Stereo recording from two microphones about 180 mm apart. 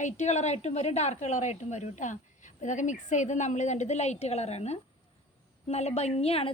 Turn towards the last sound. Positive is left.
turn(degrees=35)  # may be behind; listen again after turning